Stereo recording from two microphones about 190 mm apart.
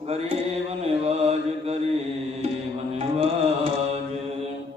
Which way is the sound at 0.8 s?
30° right (ahead or behind).